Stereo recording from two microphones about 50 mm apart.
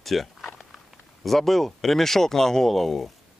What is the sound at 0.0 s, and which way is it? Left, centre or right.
Walk, centre.